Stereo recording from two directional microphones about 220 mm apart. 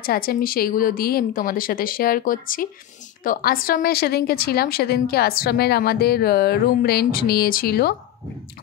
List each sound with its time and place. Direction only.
0.0 s a woman's voice: 45° left (ahead or behind)